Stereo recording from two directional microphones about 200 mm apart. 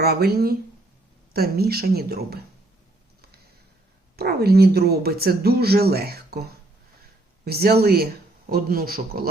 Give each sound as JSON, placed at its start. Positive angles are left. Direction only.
{"t": 0.0, "sound": "speech", "side_deg": -50}
{"t": 4.2, "sound": "speech", "side_deg": -50}
{"t": 7.4, "sound": "speech", "side_deg": -50}